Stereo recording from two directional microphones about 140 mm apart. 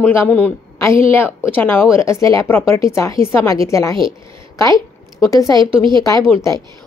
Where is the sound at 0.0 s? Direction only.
15° left (ahead or behind).